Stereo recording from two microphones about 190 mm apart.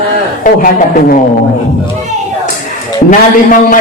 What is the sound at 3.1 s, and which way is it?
Speech, 45° left (ahead or behind).